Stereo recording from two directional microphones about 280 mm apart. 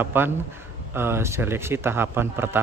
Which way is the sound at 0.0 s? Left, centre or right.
Centre.